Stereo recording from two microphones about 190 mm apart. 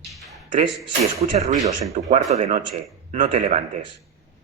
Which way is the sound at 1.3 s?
40° right (ahead or behind).